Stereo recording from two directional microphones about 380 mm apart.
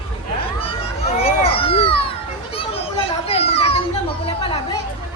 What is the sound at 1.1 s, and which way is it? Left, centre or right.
Children playing, centre.